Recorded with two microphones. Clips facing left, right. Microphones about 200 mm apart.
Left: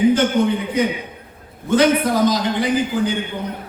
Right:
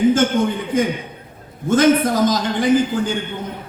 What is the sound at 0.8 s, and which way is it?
A man's voice, 45° right (ahead or behind).